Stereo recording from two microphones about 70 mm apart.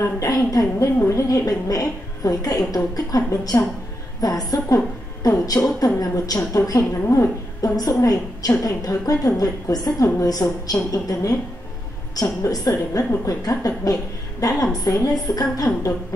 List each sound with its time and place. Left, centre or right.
0.0 s a woman's voice: left
4.7 s a woman's voice: left
5.5 s a woman's voice: left